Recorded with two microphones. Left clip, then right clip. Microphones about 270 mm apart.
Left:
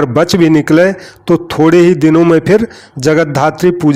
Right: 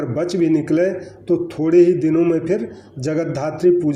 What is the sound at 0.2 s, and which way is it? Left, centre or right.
A man's voice, left.